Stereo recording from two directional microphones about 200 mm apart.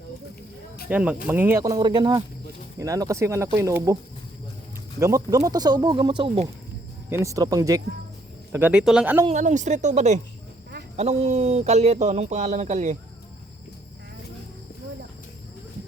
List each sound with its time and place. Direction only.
0.9 s speech: 5° right (ahead or behind)
4.9 s speech: 15° right (ahead or behind)
7.1 s speech: 15° right (ahead or behind)
9.2 s speech: 35° right (ahead or behind)